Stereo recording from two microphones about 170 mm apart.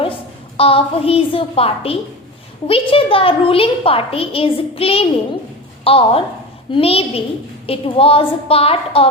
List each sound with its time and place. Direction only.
0.0 s a woman's voice: 35° left (ahead or behind)